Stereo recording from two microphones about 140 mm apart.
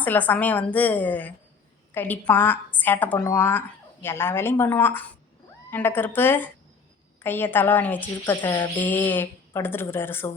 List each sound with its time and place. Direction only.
0.0 s a woman's voice: 10° left (ahead or behind)